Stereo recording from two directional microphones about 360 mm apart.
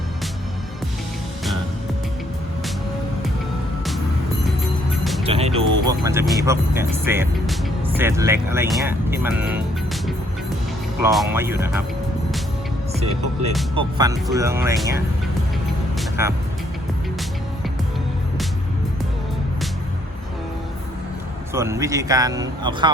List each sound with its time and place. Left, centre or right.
5.2 s music: centre
5.8 s speech: centre
11.0 s speech: centre
13.7 s speech: centre
16.0 s music: centre
21.5 s speech: centre